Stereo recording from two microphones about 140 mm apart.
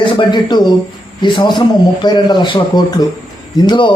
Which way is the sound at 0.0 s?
35° left (ahead or behind).